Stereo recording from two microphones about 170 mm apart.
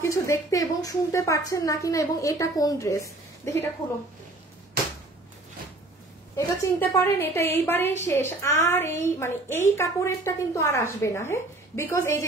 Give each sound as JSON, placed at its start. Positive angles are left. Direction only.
{"t": 0.0, "sound": "a woman's voice", "side_deg": 15}
{"t": 6.3, "sound": "a woman's voice", "side_deg": 15}